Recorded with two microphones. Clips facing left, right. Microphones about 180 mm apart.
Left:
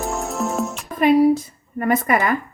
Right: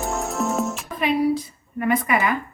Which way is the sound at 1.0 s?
45° left (ahead or behind).